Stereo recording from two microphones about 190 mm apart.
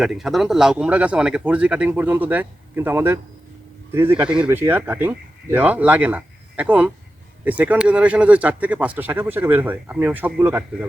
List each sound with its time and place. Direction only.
0.0 s speech: centre (ahead or behind)
4.2 s speech: 5° right (ahead or behind)